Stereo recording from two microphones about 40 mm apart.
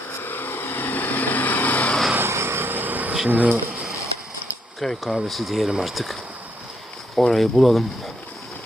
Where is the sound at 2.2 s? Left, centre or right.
Right.